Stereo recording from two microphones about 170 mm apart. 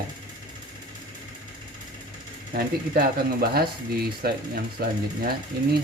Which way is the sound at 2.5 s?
65° right (ahead or behind).